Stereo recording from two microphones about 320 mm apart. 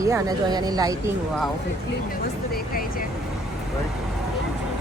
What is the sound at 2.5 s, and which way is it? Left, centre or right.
Speech, left.